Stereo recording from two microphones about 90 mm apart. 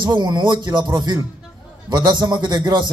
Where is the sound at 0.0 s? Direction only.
55° right (ahead or behind).